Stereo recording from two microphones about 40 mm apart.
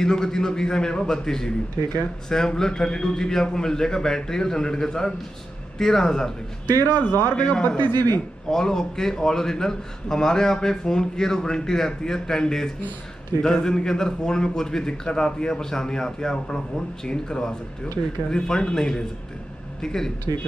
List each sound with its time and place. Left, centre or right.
0.0 s a man's voice: centre
6.8 s speech: left
7.6 s a man's voice: left
8.5 s a man's voice: centre